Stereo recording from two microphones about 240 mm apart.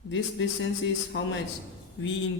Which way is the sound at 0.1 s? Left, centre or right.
Left.